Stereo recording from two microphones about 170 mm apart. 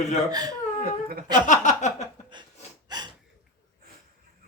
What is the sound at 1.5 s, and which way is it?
Chuckle, 45° left (ahead or behind).